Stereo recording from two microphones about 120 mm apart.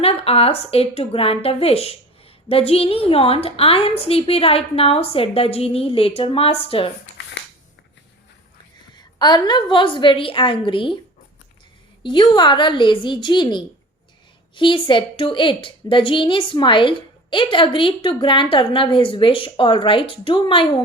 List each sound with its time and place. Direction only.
0.0 s a woman's voice: 55° left (ahead or behind)
9.0 s a woman's voice: 35° left (ahead or behind)
12.0 s a woman's voice: 40° left (ahead or behind)